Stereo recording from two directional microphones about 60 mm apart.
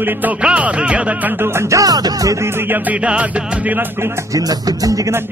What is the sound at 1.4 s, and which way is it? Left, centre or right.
Music, right.